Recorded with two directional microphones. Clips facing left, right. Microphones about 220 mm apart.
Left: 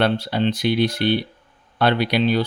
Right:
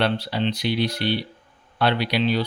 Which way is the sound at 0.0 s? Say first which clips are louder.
Left 3 dB; 45° left (ahead or behind).